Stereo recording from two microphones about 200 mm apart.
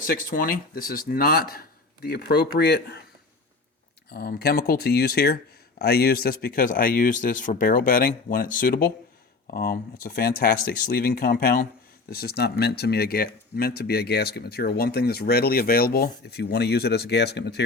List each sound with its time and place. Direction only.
0.0 s speech: 45° left (ahead or behind)
4.1 s speech: 50° left (ahead or behind)